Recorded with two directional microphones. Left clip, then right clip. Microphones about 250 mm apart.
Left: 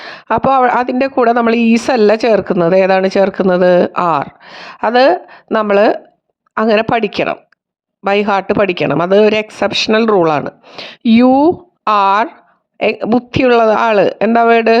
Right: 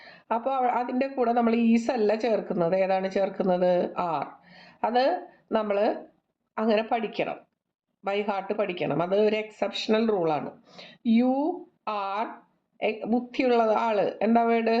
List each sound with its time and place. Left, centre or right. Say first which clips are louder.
0.0 s a woman's voice: left 15 dB; left